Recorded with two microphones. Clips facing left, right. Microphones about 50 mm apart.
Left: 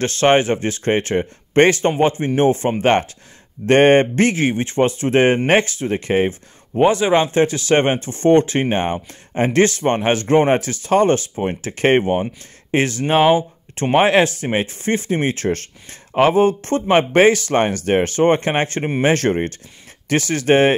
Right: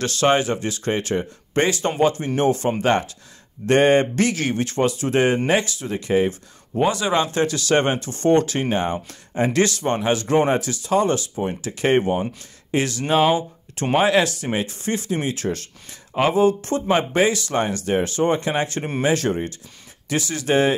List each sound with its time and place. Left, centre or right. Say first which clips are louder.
0.0 s speech: left 4 dB; left